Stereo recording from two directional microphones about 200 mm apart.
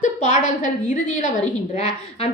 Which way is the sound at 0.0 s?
40° left (ahead or behind).